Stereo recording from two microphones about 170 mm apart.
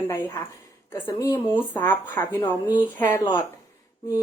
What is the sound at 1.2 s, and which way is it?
A woman's voice, 15° left (ahead or behind).